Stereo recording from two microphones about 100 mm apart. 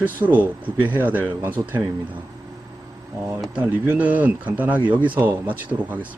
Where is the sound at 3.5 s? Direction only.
15° right (ahead or behind).